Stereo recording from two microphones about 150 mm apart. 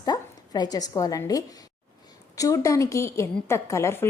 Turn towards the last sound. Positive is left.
turn(degrees=20)  # may be behind; listen again after turning